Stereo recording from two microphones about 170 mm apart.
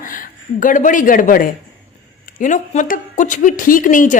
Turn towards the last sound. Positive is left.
turn(degrees=50)  # may be behind; listen again after turning